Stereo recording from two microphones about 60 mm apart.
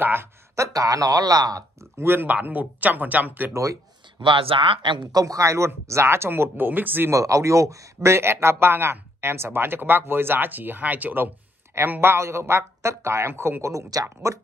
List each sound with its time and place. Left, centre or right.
0.0 s speech: right
0.6 s speech: right
2.0 s speech: right
2.3 s speech: right
5.1 s a man's voice: right
5.9 s speech: right
7.1 s speech: right
11.9 s speech: right
14.0 s a man's voice: right